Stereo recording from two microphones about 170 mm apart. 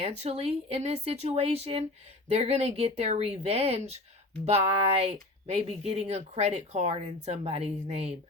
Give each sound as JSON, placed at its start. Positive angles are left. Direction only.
{"t": 0.0, "sound": "speech", "side_deg": -35}